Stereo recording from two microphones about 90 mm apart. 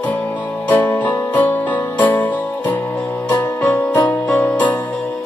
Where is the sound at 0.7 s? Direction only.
20° left (ahead or behind).